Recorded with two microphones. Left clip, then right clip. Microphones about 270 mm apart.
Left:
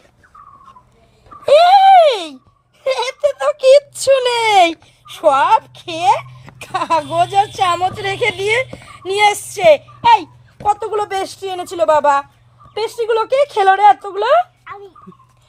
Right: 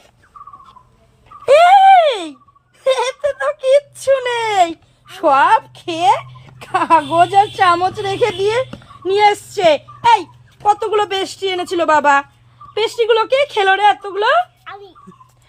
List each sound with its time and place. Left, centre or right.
1.5 s a sound: left
3.9 s whimper: left
5.2 s a woman's voice: left
14.7 s dog: centre